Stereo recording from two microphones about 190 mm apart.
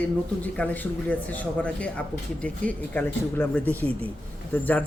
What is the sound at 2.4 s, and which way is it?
Speech, 10° left (ahead or behind).